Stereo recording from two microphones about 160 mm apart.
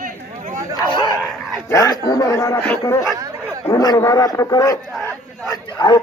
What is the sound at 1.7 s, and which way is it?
A man's voice, 20° left (ahead or behind).